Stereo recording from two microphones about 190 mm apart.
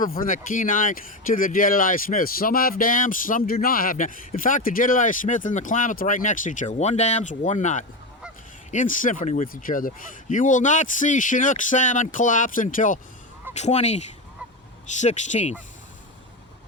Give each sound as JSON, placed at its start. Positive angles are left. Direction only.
{"t": 0.0, "sound": "speech", "side_deg": 45}